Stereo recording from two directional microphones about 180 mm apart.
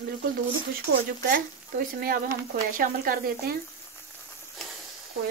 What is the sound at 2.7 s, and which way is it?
Speech, 50° right (ahead or behind).